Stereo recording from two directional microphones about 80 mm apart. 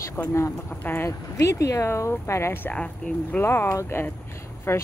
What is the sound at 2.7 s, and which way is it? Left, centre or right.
Speech, centre.